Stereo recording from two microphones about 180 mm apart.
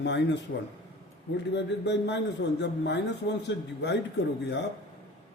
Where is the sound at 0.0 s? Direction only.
75° left (ahead or behind).